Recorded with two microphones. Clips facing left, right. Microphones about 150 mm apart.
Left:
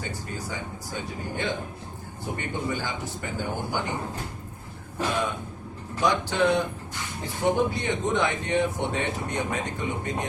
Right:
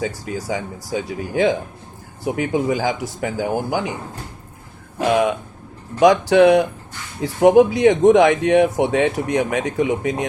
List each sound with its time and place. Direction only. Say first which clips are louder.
0.0 s speech: right 9 dB; 90° right
4.9 s speech: right 10 dB; 90° right